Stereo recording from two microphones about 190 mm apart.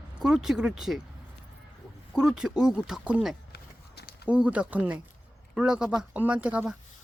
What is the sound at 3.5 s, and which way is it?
Walk, 60° left (ahead or behind).